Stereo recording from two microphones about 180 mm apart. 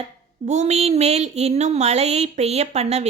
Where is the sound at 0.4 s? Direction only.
40° right (ahead or behind).